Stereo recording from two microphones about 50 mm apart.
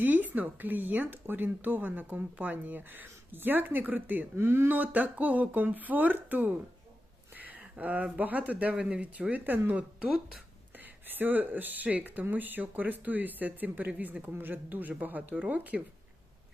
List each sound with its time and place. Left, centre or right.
0.0 s a woman's voice: right
4.4 s speech: right
4.7 s a woman's voice: right
7.3 s a sound: right
7.8 s a woman's voice: right
11.0 s a woman's voice: right